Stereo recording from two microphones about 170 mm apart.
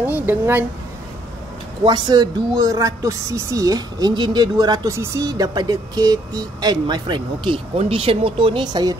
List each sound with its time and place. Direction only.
0.0 s speech: 10° right (ahead or behind)
1.9 s a woman's voice: 25° right (ahead or behind)